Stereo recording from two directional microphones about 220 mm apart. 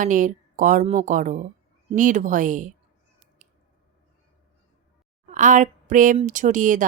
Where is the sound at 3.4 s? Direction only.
35° right (ahead or behind).